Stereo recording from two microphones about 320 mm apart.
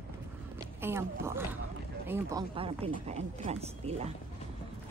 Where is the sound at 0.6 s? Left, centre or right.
Centre.